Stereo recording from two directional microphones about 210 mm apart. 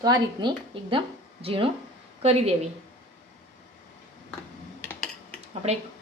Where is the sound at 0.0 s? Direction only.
20° right (ahead or behind).